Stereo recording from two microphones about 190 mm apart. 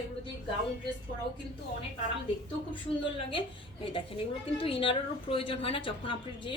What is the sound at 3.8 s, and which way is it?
Speech, 30° left (ahead or behind).